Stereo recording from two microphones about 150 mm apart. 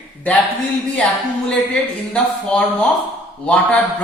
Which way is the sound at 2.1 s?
5° left (ahead or behind).